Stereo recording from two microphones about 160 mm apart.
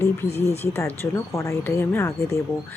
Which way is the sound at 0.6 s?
15° left (ahead or behind).